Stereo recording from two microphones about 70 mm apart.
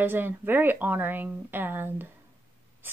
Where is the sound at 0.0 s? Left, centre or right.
Right.